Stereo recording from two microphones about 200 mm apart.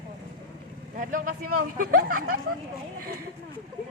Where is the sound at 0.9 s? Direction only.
40° right (ahead or behind).